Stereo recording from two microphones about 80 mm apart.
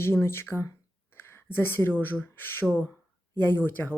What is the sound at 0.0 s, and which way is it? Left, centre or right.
Speech, left.